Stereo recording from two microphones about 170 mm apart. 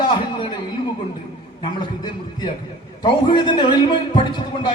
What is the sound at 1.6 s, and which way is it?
A man's voice, 25° left (ahead or behind).